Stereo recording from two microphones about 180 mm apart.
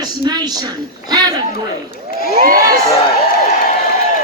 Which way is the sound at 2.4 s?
50° right (ahead or behind).